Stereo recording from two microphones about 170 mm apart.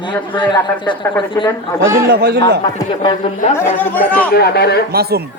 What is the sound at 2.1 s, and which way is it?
Speech, 75° right (ahead or behind).